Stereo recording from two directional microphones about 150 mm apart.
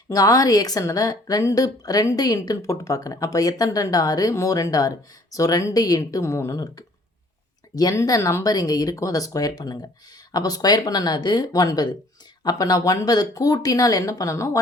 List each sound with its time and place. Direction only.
0.1 s a woman's voice: 25° left (ahead or behind)